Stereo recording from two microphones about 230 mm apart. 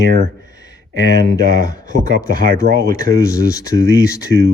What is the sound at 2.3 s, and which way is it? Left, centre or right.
Speech, right.